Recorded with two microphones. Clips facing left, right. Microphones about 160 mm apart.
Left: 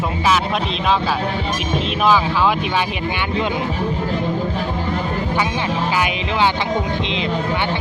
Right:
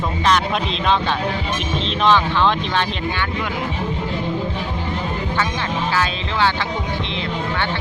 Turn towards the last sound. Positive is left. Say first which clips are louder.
# left 2 dB
turn(degrees=15)  # may be behind; listen again after turning